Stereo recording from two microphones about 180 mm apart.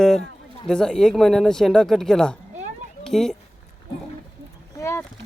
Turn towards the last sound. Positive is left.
turn(degrees=15)  # may be behind; listen again after turning